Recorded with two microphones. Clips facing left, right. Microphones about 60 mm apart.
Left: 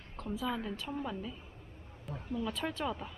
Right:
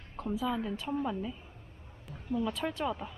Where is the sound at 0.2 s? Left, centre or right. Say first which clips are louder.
Right 4 dB; centre.